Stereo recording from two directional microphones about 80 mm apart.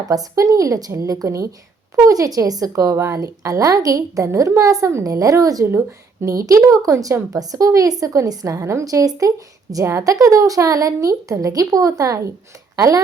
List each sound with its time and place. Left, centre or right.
0.1 s a woman's voice: right